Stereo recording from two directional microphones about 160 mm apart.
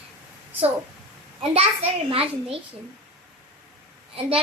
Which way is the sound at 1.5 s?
35° right (ahead or behind).